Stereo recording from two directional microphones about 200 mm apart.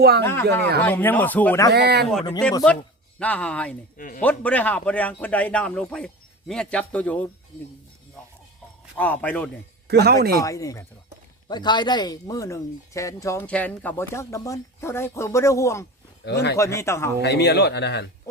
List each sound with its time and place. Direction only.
0.2 s speech: 10° left (ahead or behind)
1.7 s speech: 55° right (ahead or behind)
3.2 s a man's voice: 5° left (ahead or behind)
3.9 s speech: 45° left (ahead or behind)
4.2 s a man's voice: 10° left (ahead or behind)
9.0 s speech: 10° left (ahead or behind)
9.8 s speech: 55° right (ahead or behind)
10.4 s speech: 15° left (ahead or behind)
16.2 s speech: 55° left (ahead or behind)
16.6 s speech: 15° left (ahead or behind)
17.2 s speech: 55° left (ahead or behind)